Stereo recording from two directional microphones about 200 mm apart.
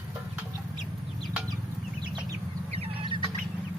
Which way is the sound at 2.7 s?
30° right (ahead or behind).